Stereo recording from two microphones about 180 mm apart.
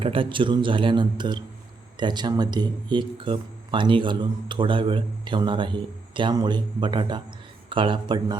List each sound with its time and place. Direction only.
0.0 s speech: 30° right (ahead or behind)